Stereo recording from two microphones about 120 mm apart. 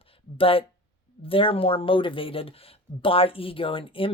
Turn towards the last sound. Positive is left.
turn(degrees=50)  # may be behind; listen again after turning